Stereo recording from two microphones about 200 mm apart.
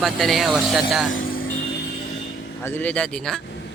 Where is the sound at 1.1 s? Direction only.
45° left (ahead or behind).